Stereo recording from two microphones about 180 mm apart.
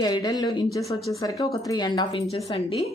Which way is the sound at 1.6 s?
25° left (ahead or behind).